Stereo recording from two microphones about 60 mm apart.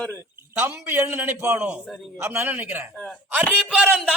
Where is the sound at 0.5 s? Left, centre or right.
Right.